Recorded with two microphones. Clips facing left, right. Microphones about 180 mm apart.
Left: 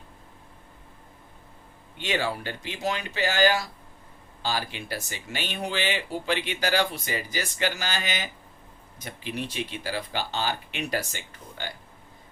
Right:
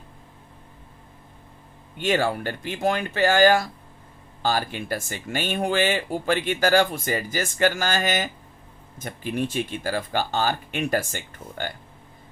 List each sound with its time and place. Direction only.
2.0 s speech: 50° right (ahead or behind)